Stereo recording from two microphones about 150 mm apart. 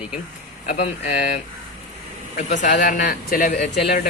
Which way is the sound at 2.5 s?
55° left (ahead or behind).